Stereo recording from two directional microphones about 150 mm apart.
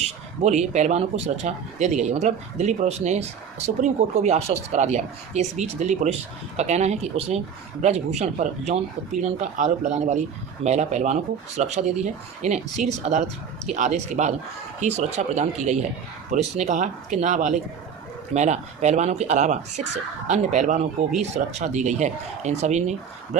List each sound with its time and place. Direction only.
0.4 s speech: 50° right (ahead or behind)